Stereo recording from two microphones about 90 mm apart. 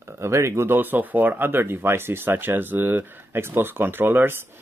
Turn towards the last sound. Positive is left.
turn(degrees=-25)  # may be behind; listen again after turning